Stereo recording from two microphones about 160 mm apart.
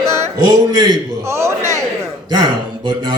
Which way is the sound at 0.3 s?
30° right (ahead or behind).